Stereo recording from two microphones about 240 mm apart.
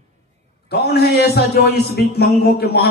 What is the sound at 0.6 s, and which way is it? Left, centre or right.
A man's voice, left.